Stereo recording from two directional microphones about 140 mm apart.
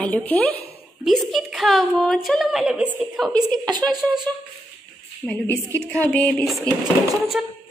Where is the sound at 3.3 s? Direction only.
30° right (ahead or behind).